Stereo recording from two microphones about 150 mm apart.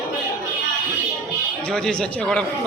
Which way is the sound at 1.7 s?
5° left (ahead or behind).